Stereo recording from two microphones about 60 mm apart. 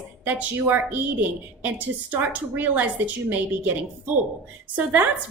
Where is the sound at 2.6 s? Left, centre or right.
Right.